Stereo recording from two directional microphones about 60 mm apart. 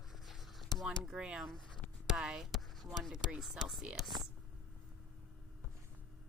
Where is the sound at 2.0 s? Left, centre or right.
Centre.